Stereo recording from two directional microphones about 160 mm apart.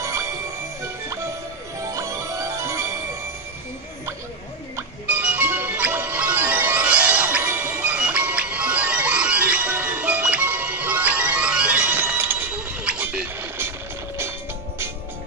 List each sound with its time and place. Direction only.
0.0 s music: 20° right (ahead or behind)
1.8 s music: 20° right (ahead or behind)
4.7 s music: 10° right (ahead or behind)